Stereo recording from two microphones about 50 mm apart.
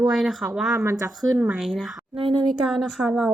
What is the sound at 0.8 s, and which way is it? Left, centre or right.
Speech, right.